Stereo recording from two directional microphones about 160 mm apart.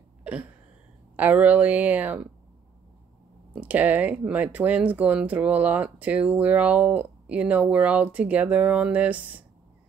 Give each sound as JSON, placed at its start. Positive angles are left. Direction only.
{"t": 0.2, "sound": "a sound", "side_deg": -10}
{"t": 1.1, "sound": "speech", "side_deg": -10}
{"t": 3.5, "sound": "speech", "side_deg": -10}